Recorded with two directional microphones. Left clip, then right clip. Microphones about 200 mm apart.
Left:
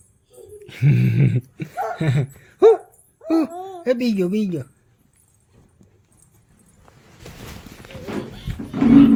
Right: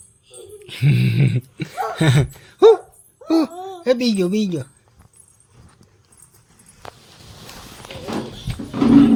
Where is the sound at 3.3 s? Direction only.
10° right (ahead or behind).